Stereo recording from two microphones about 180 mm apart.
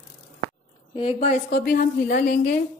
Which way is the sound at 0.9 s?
30° left (ahead or behind).